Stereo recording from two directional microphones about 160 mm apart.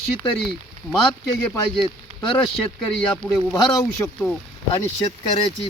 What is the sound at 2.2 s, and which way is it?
Speech, 30° left (ahead or behind).